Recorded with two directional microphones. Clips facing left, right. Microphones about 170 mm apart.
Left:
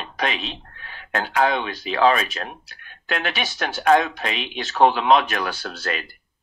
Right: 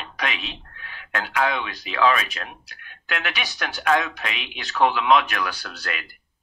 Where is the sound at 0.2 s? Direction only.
35° left (ahead or behind).